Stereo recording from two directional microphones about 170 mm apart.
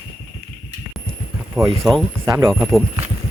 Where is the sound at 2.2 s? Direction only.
15° right (ahead or behind).